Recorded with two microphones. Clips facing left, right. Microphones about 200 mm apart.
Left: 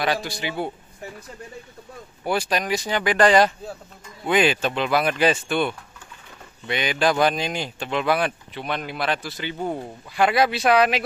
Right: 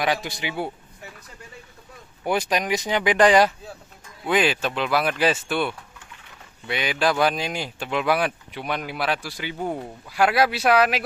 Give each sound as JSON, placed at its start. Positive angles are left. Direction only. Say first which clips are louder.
{"t": 0.0, "sound": "speech", "louder": "even", "side_deg": -15}
{"t": 2.2, "sound": "speech", "louder": "even", "side_deg": -20}